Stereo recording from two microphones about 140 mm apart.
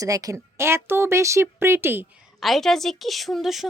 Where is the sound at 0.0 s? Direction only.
25° right (ahead or behind).